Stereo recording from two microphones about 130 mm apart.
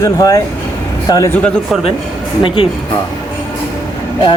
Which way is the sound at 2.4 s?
45° left (ahead or behind).